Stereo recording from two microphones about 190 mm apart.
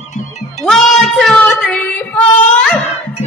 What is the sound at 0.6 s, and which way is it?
Music, centre (ahead or behind).